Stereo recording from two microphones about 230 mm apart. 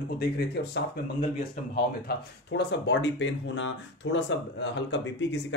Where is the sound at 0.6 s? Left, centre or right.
Left.